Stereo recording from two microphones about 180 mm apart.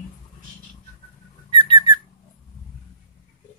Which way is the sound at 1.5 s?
25° right (ahead or behind).